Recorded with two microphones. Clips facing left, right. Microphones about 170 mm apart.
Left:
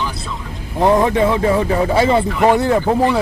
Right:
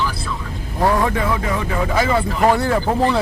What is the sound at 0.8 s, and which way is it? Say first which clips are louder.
Speech: left 5 dB; 20° left (ahead or behind).